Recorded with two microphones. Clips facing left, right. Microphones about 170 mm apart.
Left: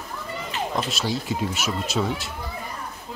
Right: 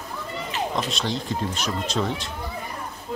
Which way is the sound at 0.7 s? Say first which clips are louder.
Even; 5° left (ahead or behind).